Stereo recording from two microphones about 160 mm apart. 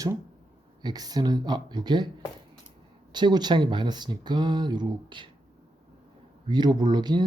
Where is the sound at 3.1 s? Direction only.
25° right (ahead or behind).